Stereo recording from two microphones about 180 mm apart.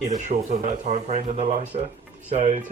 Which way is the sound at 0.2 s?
40° right (ahead or behind).